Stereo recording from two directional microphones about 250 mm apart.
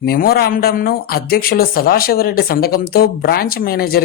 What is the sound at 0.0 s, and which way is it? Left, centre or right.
Speech, left.